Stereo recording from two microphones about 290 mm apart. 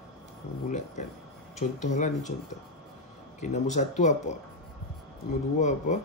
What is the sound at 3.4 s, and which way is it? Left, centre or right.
Speech, left.